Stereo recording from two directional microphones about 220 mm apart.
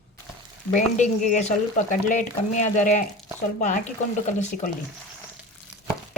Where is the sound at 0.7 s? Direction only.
35° left (ahead or behind).